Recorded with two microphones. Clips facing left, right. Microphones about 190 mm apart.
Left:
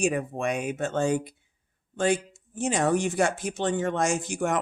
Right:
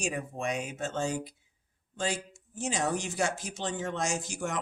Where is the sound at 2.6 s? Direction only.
60° left (ahead or behind).